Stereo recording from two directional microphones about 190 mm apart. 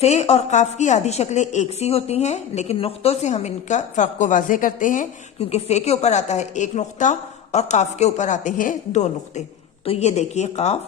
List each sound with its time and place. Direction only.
0.0 s speech: 35° left (ahead or behind)
5.4 s speech: 35° left (ahead or behind)